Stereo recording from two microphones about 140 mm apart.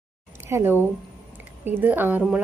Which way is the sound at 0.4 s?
15° right (ahead or behind).